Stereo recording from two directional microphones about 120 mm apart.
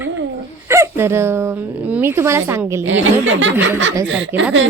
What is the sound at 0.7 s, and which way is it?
A woman's voice, 20° right (ahead or behind).